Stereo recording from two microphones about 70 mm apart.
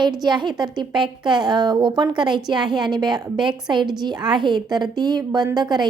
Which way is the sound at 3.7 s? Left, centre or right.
Right.